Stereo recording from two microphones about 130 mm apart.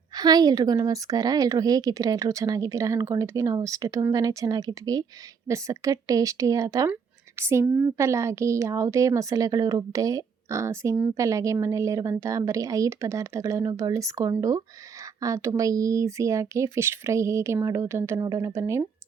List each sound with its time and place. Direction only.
0.2 s speech: 30° right (ahead or behind)